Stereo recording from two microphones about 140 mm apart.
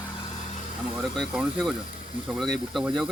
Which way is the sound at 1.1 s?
5° left (ahead or behind).